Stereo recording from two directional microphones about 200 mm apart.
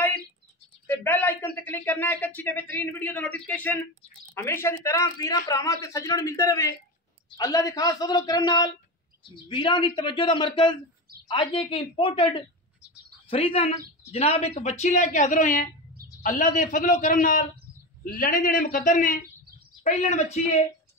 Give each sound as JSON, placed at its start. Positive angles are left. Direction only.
{"t": 0.8, "sound": "a woman's voice", "side_deg": 10}